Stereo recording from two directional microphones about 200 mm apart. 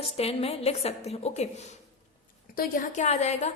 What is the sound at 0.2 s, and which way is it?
A woman's voice, 30° left (ahead or behind).